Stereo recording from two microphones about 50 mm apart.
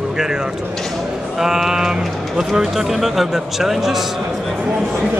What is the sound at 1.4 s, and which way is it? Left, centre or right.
Speech, centre.